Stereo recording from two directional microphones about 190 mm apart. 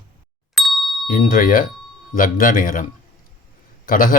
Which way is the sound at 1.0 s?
45° left (ahead or behind).